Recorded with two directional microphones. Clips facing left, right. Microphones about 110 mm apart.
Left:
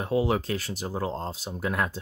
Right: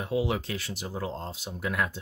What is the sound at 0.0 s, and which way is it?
Speech, 40° left (ahead or behind).